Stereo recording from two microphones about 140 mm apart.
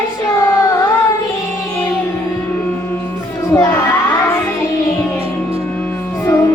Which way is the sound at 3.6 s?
15° left (ahead or behind).